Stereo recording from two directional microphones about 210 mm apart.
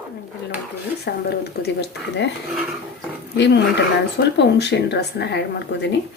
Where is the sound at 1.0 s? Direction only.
50° left (ahead or behind).